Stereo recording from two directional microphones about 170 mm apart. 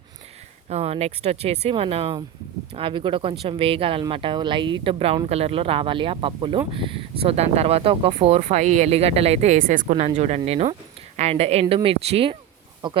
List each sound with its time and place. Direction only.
0.7 s speech: 40° right (ahead or behind)